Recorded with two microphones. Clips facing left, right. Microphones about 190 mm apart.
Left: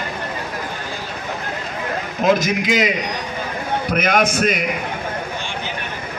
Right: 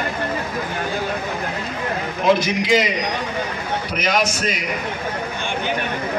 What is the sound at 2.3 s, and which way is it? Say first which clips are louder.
Speech: even; 45° left (ahead or behind).